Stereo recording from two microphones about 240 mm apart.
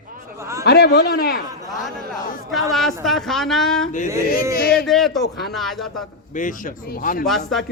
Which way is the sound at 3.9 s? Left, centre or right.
Left.